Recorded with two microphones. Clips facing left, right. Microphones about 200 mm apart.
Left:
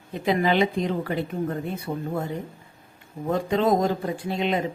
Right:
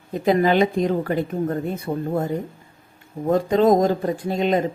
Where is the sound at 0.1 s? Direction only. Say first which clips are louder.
Right 5 dB; 45° right (ahead or behind).